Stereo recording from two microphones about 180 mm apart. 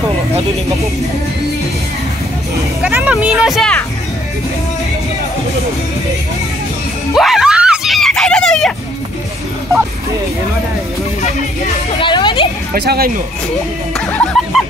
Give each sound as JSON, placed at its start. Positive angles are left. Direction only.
{"t": 2.8, "sound": "speech", "side_deg": -5}
{"t": 7.2, "sound": "screaming", "side_deg": 0}
{"t": 12.0, "sound": "music", "side_deg": 25}
{"t": 12.7, "sound": "speech", "side_deg": -60}
{"t": 13.9, "sound": "speech", "side_deg": 5}